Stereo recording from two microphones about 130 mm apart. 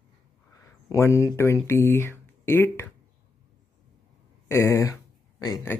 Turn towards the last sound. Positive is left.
turn(degrees=25)  # may be behind; listen again after turning